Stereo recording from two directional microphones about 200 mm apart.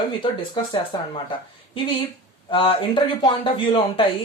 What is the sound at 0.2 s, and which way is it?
Speech, 25° left (ahead or behind).